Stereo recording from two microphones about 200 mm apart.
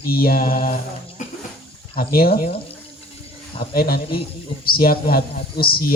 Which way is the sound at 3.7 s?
50° left (ahead or behind).